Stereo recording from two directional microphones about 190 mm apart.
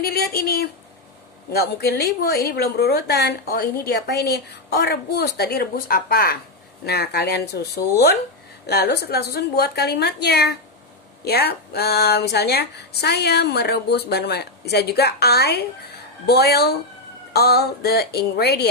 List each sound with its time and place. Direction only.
0.0 s speech: 55° left (ahead or behind)